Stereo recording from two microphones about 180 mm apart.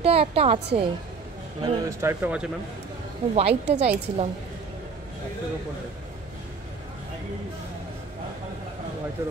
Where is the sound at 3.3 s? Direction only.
35° right (ahead or behind).